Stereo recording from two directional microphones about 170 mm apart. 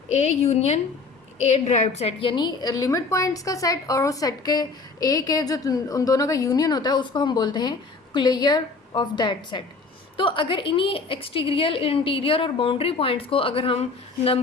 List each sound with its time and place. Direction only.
0.1 s a woman's voice: 40° left (ahead or behind)